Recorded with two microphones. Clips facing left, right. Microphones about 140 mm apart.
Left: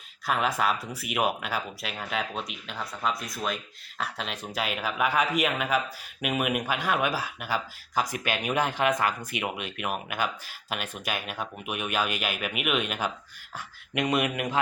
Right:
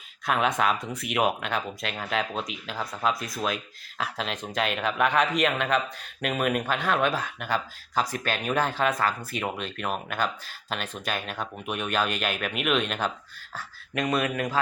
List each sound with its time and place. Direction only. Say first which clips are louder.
0.3 s speech: right 2 dB; centre (ahead or behind)
13.6 s speech: even; 20° left (ahead or behind)